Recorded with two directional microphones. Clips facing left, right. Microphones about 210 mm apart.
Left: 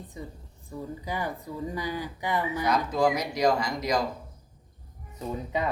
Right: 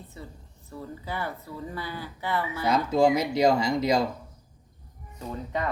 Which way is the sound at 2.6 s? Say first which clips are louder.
Right 4 dB; 25° right (ahead or behind).